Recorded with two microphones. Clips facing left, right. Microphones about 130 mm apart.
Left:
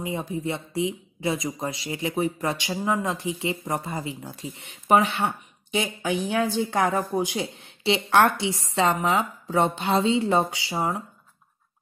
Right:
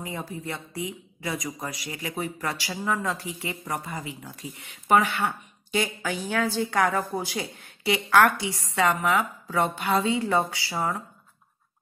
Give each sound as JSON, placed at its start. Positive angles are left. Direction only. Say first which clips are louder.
{"t": 0.0, "sound": "speech", "louder": "left 5 dB", "side_deg": 20}